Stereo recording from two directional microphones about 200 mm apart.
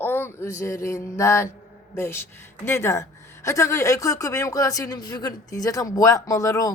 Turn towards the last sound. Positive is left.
turn(degrees=15)  # may be behind; listen again after turning